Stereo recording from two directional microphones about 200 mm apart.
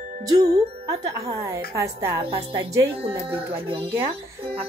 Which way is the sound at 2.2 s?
30° right (ahead or behind).